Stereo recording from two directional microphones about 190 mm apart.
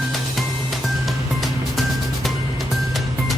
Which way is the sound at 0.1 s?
Centre (ahead or behind).